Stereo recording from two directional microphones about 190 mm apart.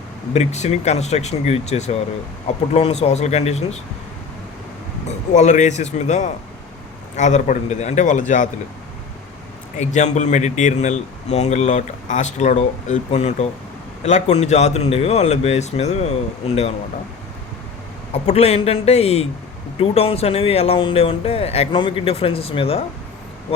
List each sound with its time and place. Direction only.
0.3 s speech: 35° left (ahead or behind)
5.0 s speech: 40° left (ahead or behind)
9.7 s speech: 40° left (ahead or behind)
18.1 s speech: 35° left (ahead or behind)